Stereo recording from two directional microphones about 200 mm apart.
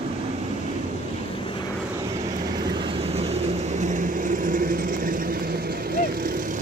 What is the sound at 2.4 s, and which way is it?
Vehicle, 20° right (ahead or behind).